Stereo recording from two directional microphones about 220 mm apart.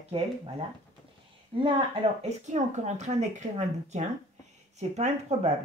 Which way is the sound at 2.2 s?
30° right (ahead or behind).